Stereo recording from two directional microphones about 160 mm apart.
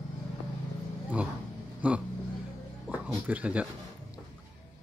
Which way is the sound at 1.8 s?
10° right (ahead or behind).